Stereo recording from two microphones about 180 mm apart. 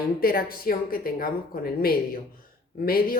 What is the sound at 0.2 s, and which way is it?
Speech, 55° left (ahead or behind).